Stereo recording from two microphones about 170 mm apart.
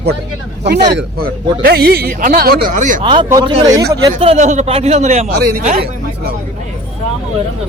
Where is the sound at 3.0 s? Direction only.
30° right (ahead or behind).